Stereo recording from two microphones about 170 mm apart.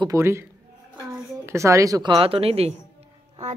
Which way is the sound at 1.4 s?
15° right (ahead or behind).